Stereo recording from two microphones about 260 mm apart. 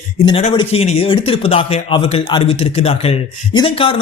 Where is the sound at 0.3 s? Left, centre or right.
Centre.